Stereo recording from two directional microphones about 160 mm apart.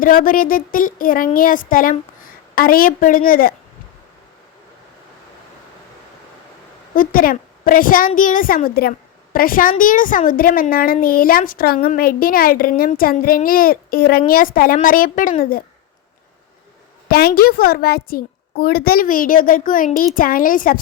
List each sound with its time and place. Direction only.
0.0 s a child's voice: 60° left (ahead or behind)
6.9 s a child's voice: 60° left (ahead or behind)
17.1 s a child's voice: 70° left (ahead or behind)